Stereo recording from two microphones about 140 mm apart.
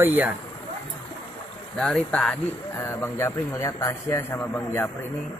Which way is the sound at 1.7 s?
5° left (ahead or behind).